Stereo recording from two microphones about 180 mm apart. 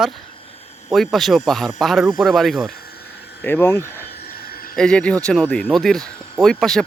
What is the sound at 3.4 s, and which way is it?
Speech, 10° left (ahead or behind).